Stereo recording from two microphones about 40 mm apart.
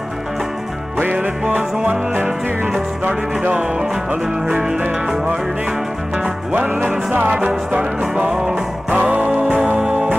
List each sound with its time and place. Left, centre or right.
3.1 s music: right
5.0 s music: centre
5.3 s music: right
6.5 s music: right
8.9 s music: right
9.8 s music: right